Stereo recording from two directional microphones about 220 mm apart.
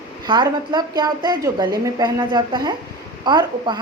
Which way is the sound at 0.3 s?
20° right (ahead or behind).